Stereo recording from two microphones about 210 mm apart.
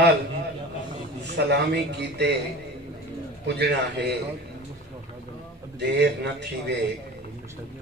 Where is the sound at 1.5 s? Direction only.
55° right (ahead or behind).